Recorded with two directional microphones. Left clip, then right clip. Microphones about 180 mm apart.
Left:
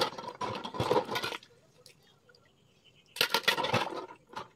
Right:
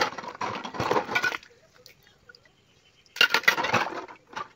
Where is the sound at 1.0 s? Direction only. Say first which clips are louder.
Right 8 dB; 10° right (ahead or behind).